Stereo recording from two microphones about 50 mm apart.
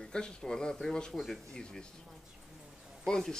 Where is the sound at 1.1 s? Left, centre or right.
Centre.